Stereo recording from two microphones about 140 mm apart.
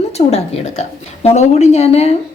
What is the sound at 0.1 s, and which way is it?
A woman's voice, 50° left (ahead or behind).